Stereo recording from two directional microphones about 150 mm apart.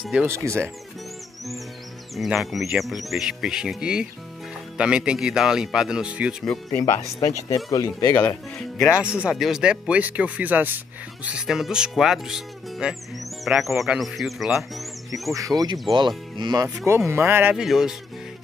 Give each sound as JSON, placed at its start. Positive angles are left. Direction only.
{"t": 0.0, "sound": "speech", "side_deg": -5}
{"t": 0.3, "sound": "speech", "side_deg": -20}
{"t": 2.1, "sound": "speech", "side_deg": 0}
{"t": 6.4, "sound": "speech", "side_deg": 5}
{"t": 7.4, "sound": "speech", "side_deg": 20}
{"t": 8.9, "sound": "speech", "side_deg": -5}
{"t": 15.3, "sound": "speech", "side_deg": -25}
{"t": 16.6, "sound": "speech", "side_deg": -15}
{"t": 17.6, "sound": "speech", "side_deg": -5}